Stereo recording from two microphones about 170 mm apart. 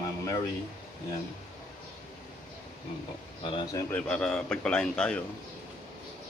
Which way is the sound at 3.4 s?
25° left (ahead or behind).